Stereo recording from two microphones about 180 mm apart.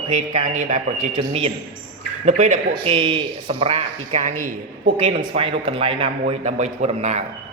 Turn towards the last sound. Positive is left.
turn(degrees=-40)  # may be behind; listen again after turning